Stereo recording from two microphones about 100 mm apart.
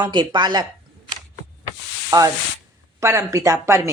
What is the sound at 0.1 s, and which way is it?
Speech, 50° right (ahead or behind).